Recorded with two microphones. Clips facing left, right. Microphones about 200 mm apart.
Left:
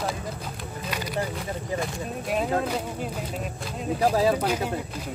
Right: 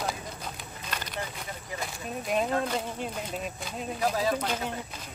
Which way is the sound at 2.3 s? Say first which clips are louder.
Left 2 dB; 5° left (ahead or behind).